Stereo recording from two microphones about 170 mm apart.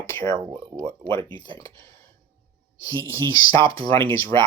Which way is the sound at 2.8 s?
20° left (ahead or behind).